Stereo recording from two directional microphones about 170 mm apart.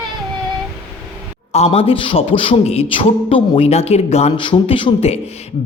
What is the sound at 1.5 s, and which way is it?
A man's voice, 35° left (ahead or behind).